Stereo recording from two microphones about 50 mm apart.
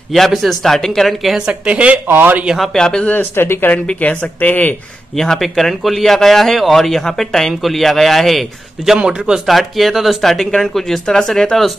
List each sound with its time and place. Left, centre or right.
0.1 s a man's voice: centre
1.4 s speech: right
2.0 s a man's voice: right
2.7 s speech: centre
3.2 s speech: left
4.0 s speech: left
5.1 s a man's voice: centre
8.9 s speech: centre
9.5 s a man's voice: centre